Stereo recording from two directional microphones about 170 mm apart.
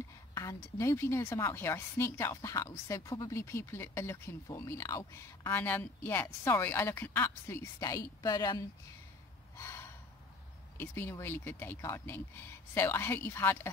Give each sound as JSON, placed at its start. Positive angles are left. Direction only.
{"t": 0.3, "sound": "a woman's voice", "side_deg": 15}
{"t": 9.6, "sound": "gasp", "side_deg": 15}
{"t": 10.8, "sound": "a woman's voice", "side_deg": 15}